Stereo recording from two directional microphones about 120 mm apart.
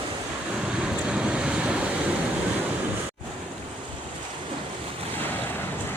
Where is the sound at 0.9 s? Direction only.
10° right (ahead or behind).